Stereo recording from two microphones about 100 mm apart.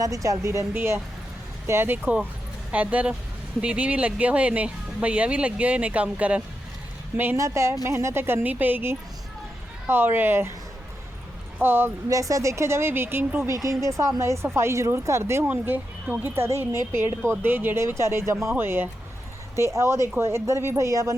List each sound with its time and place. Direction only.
0.0 s speech: 35° right (ahead or behind); by 6.4 s 15° right (ahead or behind)
7.3 s speech: 30° right (ahead or behind)
11.6 s speech: 20° right (ahead or behind)
12.1 s speech: 35° right (ahead or behind)
13.5 s speech: 30° right (ahead or behind)